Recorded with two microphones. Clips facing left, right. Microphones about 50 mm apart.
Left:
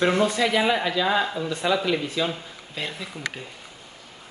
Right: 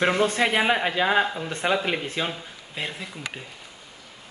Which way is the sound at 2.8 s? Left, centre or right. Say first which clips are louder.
Even; right.